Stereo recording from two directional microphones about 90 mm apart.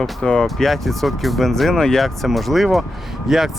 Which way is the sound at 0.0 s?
5° left (ahead or behind).